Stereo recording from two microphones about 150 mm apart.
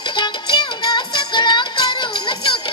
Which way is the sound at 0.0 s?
30° left (ahead or behind).